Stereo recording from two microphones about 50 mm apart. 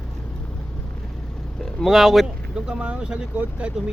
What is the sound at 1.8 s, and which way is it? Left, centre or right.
Speech, centre.